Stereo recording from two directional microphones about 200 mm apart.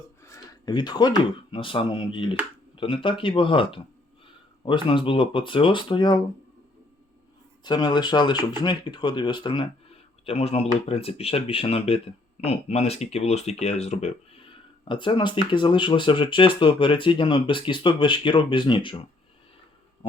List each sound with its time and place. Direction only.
0.6 s speech: 20° left (ahead or behind)
7.6 s speech: 20° left (ahead or behind)
14.8 s speech: 25° left (ahead or behind)